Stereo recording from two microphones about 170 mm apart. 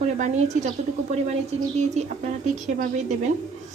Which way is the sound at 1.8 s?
45° right (ahead or behind).